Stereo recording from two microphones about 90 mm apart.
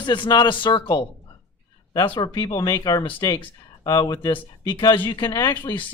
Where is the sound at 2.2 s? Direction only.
45° left (ahead or behind).